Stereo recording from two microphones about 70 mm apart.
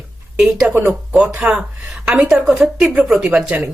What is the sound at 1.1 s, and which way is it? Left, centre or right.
Speech, centre.